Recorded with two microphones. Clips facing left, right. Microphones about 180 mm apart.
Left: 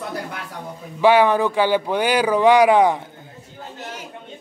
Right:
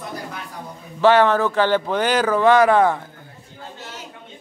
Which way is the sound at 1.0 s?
10° left (ahead or behind).